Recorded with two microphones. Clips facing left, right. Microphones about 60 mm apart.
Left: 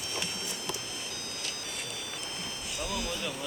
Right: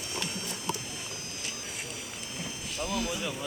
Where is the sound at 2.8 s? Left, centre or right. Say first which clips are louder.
Right 3 dB; centre.